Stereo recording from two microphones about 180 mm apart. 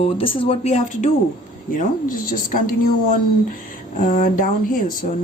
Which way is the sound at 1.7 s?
50° left (ahead or behind).